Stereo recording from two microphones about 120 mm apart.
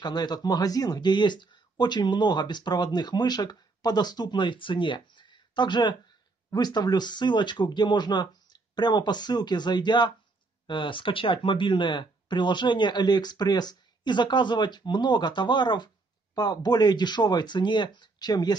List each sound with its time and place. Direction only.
0.0 s speech: 35° left (ahead or behind)